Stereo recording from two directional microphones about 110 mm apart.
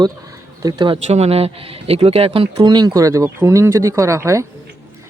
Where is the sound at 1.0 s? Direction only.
80° right; by 2.6 s 60° right (ahead or behind).